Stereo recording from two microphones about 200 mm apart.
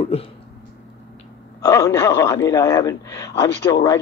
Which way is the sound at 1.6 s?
15° left (ahead or behind).